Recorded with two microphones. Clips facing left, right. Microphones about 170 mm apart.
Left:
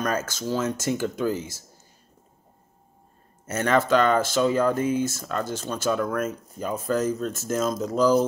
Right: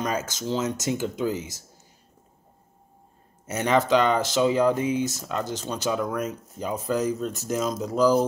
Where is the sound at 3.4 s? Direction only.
15° right (ahead or behind).